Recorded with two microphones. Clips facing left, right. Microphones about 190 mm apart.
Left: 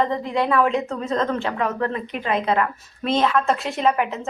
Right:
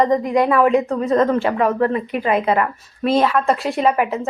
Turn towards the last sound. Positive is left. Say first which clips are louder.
# right 3 dB
turn(degrees=-5)  # may be behind; listen again after turning